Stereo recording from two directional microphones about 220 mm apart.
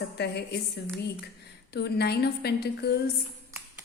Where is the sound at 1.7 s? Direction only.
50° left (ahead or behind).